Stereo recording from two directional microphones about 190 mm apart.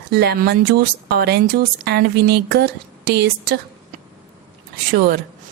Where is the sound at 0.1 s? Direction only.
60° right (ahead or behind).